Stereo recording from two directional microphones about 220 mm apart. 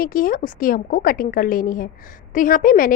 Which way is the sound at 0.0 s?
40° left (ahead or behind).